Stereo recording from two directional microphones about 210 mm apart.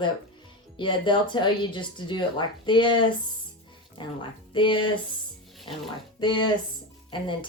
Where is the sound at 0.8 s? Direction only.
20° left (ahead or behind).